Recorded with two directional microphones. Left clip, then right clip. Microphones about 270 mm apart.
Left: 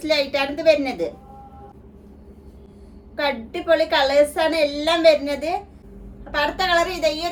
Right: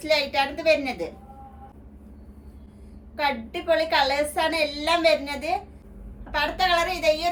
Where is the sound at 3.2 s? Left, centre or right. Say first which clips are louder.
Left 2 dB; centre.